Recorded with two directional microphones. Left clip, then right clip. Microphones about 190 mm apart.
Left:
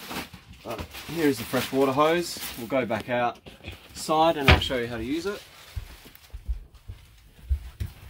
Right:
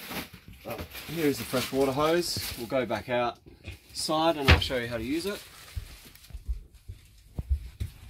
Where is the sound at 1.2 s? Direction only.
15° right (ahead or behind).